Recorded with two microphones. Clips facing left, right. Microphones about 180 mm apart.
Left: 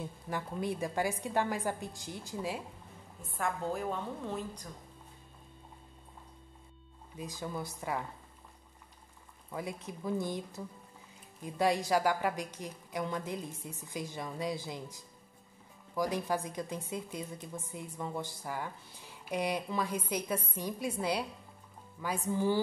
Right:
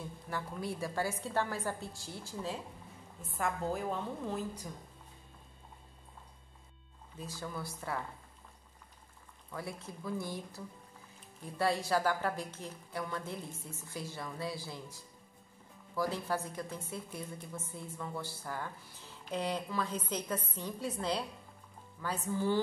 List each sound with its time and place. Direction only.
0.0 s a woman's voice: 20° left (ahead or behind)
3.2 s a woman's voice: centre (ahead or behind)
7.2 s a woman's voice: 15° left (ahead or behind)
9.5 s a woman's voice: 20° left (ahead or behind)